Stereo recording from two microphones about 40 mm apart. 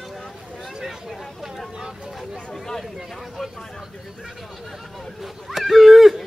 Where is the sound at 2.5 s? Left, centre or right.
Centre.